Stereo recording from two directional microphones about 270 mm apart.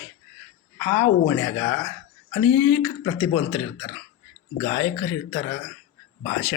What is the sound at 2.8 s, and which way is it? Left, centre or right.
Speech, centre.